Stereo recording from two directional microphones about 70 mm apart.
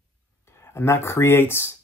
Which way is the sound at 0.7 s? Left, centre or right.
Left.